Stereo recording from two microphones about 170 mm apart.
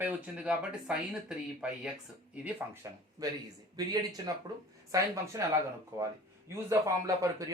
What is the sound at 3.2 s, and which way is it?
Speech, 20° right (ahead or behind).